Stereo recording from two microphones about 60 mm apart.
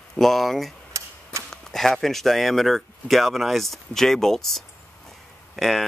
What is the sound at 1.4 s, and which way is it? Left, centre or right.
Speech, centre.